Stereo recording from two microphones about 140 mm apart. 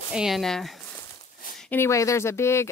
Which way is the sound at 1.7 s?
20° left (ahead or behind).